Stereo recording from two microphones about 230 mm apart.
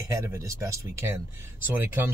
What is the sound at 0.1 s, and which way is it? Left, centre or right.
Speech, centre.